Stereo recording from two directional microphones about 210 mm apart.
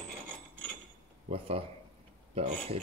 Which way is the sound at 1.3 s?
25° right (ahead or behind).